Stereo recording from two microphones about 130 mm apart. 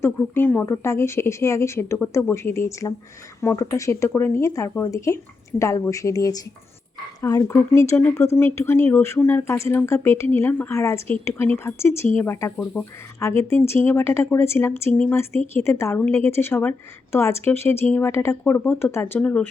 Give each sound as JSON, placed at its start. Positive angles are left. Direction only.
{"t": 0.0, "sound": "a woman's voice", "side_deg": 20}